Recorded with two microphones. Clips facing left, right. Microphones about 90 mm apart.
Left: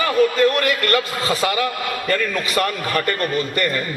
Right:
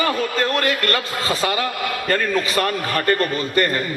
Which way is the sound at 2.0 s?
40° right (ahead or behind).